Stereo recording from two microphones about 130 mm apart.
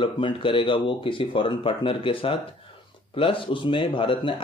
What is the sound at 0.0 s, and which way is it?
A man's voice, 40° left (ahead or behind).